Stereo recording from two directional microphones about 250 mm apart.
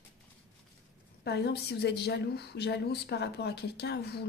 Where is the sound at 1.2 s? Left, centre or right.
Left.